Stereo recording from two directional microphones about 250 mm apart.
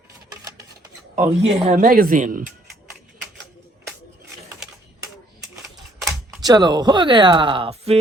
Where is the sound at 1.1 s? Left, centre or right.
Right.